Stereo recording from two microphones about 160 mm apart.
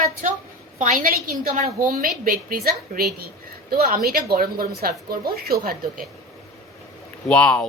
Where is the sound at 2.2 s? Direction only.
65° right (ahead or behind).